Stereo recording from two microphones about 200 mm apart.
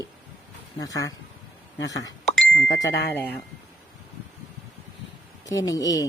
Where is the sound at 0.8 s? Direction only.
15° left (ahead or behind).